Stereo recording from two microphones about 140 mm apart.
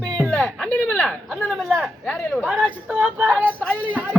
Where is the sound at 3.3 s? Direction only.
10° left (ahead or behind).